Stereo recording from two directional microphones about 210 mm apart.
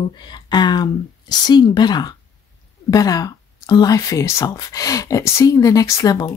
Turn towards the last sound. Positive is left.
turn(degrees=15)  # may be behind; listen again after turning